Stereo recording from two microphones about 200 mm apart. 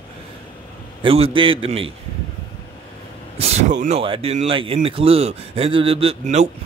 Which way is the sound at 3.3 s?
35° right (ahead or behind).